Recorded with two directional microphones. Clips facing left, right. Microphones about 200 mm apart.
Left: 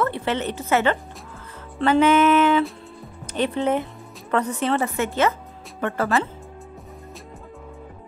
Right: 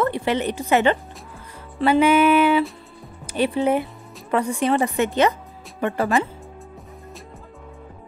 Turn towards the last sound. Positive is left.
turn(degrees=0)  # may be behind; listen again after turning